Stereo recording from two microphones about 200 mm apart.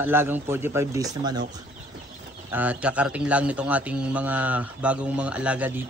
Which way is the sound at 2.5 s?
10° right (ahead or behind).